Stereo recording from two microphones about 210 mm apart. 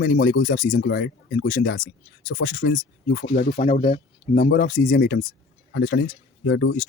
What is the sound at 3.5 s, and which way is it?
Speech, 35° left (ahead or behind).